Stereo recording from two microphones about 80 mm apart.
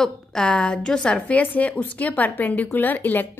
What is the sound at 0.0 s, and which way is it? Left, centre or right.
A woman's voice, centre.